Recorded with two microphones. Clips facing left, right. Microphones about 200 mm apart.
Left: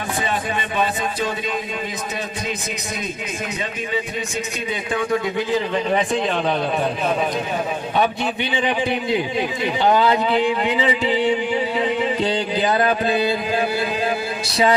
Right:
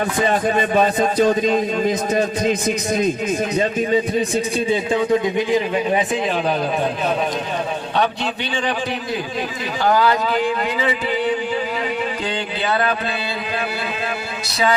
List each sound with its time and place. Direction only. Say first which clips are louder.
0.3 s speech: right 6 dB; 45° right (ahead or behind)
4.7 s a man's voice: right 4 dB; 25° right (ahead or behind)
9.8 s a sound: even; 20° left (ahead or behind)
12.8 s speech: left 4 dB; 45° left (ahead or behind)